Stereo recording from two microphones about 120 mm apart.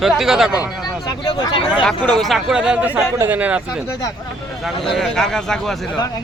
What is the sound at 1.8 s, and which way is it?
Speech, 5° left (ahead or behind).